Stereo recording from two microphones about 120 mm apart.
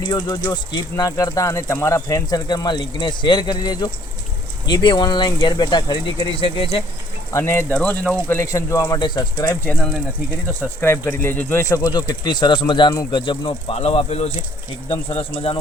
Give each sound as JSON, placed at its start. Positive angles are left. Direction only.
{"t": 0.0, "sound": "speech", "side_deg": 40}
{"t": 7.3, "sound": "speech", "side_deg": 20}
{"t": 8.3, "sound": "speech", "side_deg": 25}
{"t": 9.5, "sound": "speech", "side_deg": 10}
{"t": 10.6, "sound": "speech", "side_deg": 20}
{"t": 11.6, "sound": "speech", "side_deg": 30}